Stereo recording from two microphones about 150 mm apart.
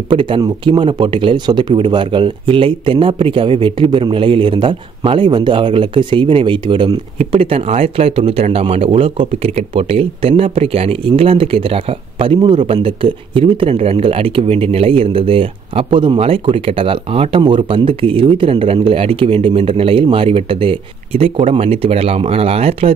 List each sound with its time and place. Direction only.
0.1 s speech: 35° right (ahead or behind)